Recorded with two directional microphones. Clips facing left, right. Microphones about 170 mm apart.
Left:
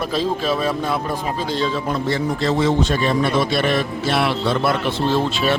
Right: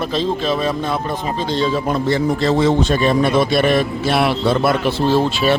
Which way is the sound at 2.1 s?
20° right (ahead or behind).